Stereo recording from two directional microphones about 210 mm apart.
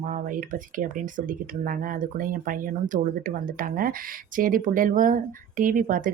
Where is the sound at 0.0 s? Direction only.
40° right (ahead or behind).